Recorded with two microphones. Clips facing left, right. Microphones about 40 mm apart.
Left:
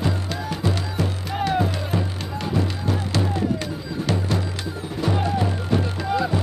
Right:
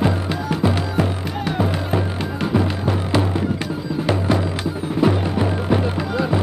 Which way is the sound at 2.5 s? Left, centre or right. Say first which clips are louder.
Right 4 dB; right.